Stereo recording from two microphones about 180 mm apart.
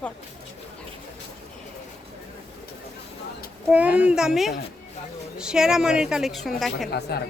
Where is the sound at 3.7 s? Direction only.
5° right (ahead or behind).